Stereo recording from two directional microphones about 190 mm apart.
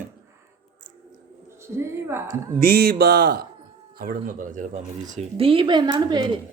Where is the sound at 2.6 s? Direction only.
55° right (ahead or behind); by 6.3 s 25° right (ahead or behind).